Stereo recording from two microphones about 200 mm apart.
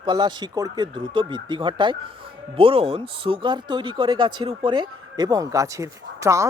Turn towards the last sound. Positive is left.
turn(degrees=-15)  # may be behind; listen again after turning